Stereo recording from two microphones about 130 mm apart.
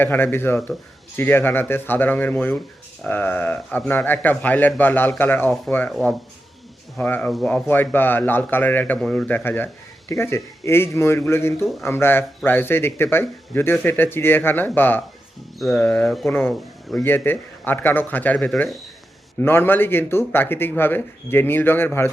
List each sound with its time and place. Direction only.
0.0 s speech: 15° left (ahead or behind)
5.9 s speech: centre (ahead or behind)
7.0 s speech: 10° left (ahead or behind)
15.5 s speech: centre (ahead or behind)
15.8 s speech: 10° left (ahead or behind)
16.0 s speech: centre (ahead or behind)
16.3 s speech: 15° left (ahead or behind)